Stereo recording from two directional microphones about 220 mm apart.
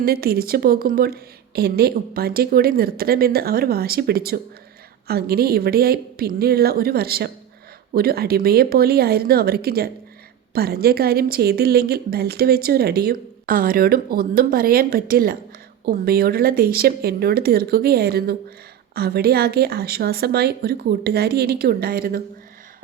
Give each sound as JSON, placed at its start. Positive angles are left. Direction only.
{"t": 0.0, "sound": "a woman's voice", "side_deg": -45}